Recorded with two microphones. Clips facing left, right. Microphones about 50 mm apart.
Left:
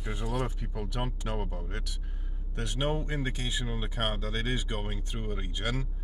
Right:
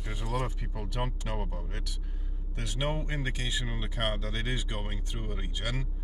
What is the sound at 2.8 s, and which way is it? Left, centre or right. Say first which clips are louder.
Speech: left 1 dB; right.